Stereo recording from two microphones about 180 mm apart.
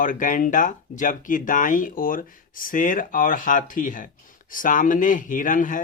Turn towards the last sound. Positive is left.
turn(degrees=45)  # may be behind; listen again after turning